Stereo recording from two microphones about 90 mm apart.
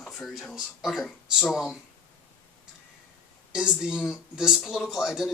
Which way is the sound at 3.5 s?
10° right (ahead or behind).